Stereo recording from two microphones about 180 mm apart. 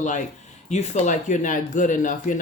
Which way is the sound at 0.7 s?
40° left (ahead or behind).